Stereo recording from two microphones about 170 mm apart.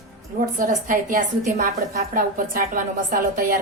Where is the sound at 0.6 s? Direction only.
50° right (ahead or behind).